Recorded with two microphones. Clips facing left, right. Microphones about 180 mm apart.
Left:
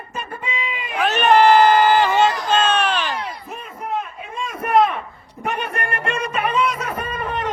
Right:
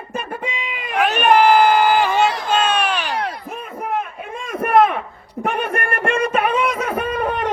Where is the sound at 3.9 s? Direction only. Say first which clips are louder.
Even; 55° right (ahead or behind).